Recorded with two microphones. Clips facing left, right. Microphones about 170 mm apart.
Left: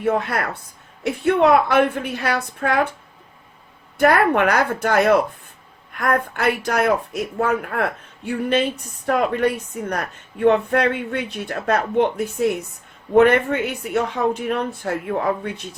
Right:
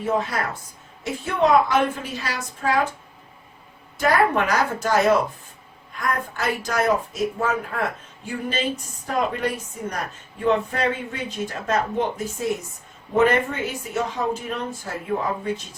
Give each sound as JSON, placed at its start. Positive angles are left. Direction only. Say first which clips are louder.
{"t": 0.0, "sound": "speech", "louder": "left 3 dB", "side_deg": 65}
{"t": 3.9, "sound": "speech", "louder": "left 4 dB", "side_deg": 60}